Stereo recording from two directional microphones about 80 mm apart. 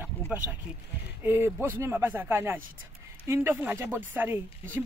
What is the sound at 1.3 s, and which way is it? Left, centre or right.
Speech, right.